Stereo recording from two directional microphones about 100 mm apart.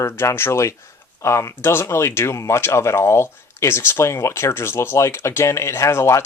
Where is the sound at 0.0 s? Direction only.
25° left (ahead or behind).